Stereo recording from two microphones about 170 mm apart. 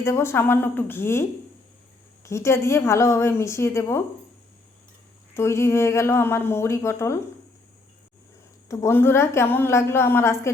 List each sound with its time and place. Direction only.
0.0 s a woman's voice: 15° left (ahead or behind)
2.2 s a woman's voice: 15° left (ahead or behind)
5.3 s a woman's voice: 15° left (ahead or behind)
8.7 s a woman's voice: 15° left (ahead or behind)